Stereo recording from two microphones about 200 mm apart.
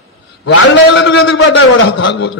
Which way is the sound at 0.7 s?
60° left (ahead or behind).